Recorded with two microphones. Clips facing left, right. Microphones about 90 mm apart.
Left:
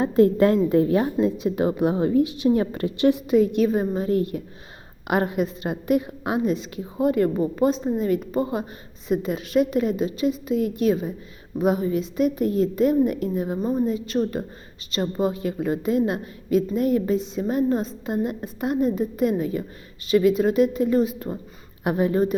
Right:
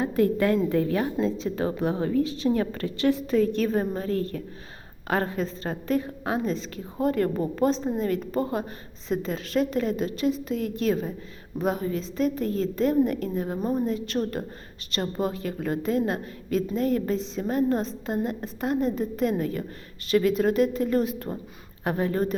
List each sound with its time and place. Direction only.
0.0 s a woman's voice: 25° left (ahead or behind)